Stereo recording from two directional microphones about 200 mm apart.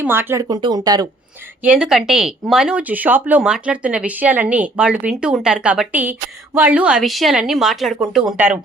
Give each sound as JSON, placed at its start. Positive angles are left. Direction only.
{"t": 0.0, "sound": "speech", "side_deg": -10}
{"t": 1.6, "sound": "speech", "side_deg": -5}